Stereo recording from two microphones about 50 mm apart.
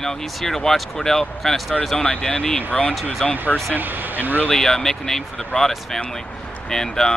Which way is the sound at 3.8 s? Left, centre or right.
Right.